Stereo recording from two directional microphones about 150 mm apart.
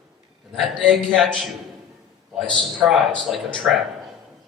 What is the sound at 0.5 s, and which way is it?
Speech, centre (ahead or behind).